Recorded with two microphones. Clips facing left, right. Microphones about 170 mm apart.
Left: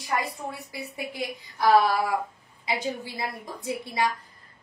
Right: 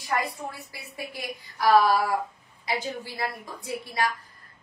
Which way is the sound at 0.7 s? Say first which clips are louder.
Left 4 dB; 20° left (ahead or behind).